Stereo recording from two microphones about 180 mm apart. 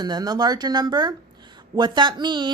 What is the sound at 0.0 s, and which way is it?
A woman's voice, 20° right (ahead or behind).